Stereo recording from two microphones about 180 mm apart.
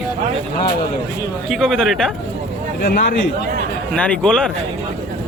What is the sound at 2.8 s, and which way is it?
Speech, 50° left (ahead or behind).